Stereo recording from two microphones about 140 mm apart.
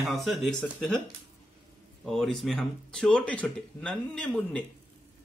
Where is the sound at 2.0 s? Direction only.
Centre (ahead or behind).